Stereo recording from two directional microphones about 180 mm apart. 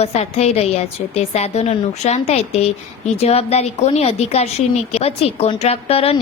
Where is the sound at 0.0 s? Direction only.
35° left (ahead or behind).